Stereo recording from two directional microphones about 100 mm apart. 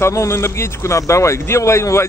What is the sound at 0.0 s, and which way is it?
Speech, 30° left (ahead or behind).